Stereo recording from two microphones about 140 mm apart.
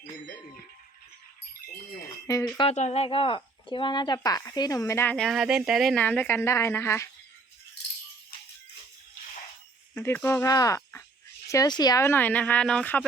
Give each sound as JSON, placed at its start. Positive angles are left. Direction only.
{"t": 2.2, "sound": "speech", "side_deg": 25}
{"t": 2.6, "sound": "speech", "side_deg": 50}
{"t": 5.1, "sound": "speech", "side_deg": 0}
{"t": 6.0, "sound": "speech", "side_deg": 10}
{"t": 9.9, "sound": "speech", "side_deg": 15}
{"t": 12.0, "sound": "speech", "side_deg": 15}